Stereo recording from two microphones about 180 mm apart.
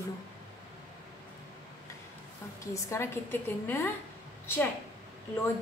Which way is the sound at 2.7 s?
15° left (ahead or behind).